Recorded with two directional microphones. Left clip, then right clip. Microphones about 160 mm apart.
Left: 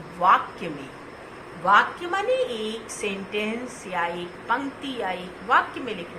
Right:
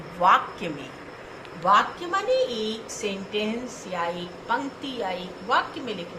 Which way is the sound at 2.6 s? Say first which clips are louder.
Even; 25° right (ahead or behind).